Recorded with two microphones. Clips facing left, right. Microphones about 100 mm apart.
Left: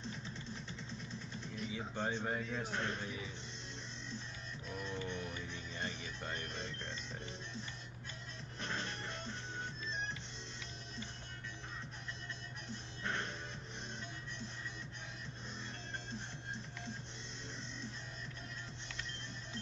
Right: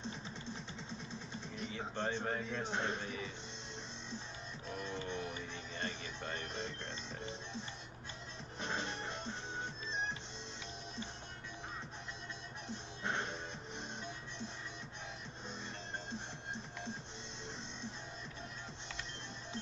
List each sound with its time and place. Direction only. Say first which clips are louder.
1.7 s a man's voice: right 1 dB; 10° left (ahead or behind)
2.7 s music: right 3 dB; 20° right (ahead or behind)
4.7 s music: right 1 dB; 15° right (ahead or behind)
5.8 s a man's voice: right 1 dB; 10° left (ahead or behind)
8.5 s music: right 2 dB; 20° right (ahead or behind)
13.0 s music: right 2 dB; 20° right (ahead or behind)